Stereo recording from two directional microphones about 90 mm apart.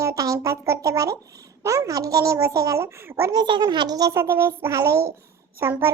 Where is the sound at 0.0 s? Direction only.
40° right (ahead or behind).